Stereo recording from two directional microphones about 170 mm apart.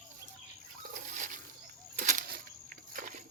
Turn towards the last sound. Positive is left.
turn(degrees=-55)  # may be behind; listen again after turning